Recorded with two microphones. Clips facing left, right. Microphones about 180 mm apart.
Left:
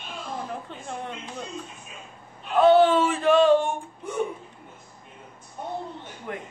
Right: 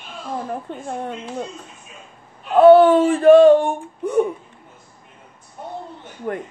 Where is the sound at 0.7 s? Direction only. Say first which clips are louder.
Right 7 dB; 45° right (ahead or behind).